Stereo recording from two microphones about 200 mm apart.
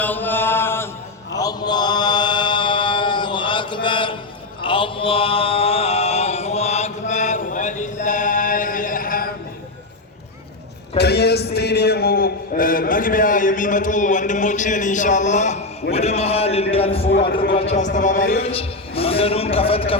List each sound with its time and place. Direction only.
0.0 s chant: 10° left (ahead or behind); by 4.2 s 25° left (ahead or behind)
4.6 s mantra: 25° left (ahead or behind); by 9.3 s 45° left (ahead or behind)
10.9 s a sound: 55° left (ahead or behind); by 16.6 s 30° left (ahead or behind)
16.7 s a man's voice: 30° left (ahead or behind)
17.1 s a man's voice: 50° left (ahead or behind)
17.5 s a man's voice: 35° left (ahead or behind)
18.5 s a man's voice: 30° left (ahead or behind)